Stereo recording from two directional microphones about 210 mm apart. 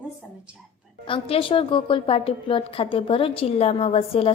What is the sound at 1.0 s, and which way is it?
A woman's voice, 25° left (ahead or behind).